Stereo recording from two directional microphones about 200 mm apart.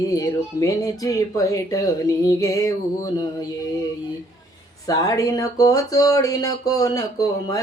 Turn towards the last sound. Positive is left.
turn(degrees=15)  # may be behind; listen again after turning